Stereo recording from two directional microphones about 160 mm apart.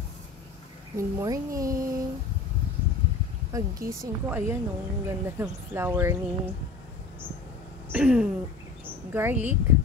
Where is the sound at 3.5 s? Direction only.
20° right (ahead or behind).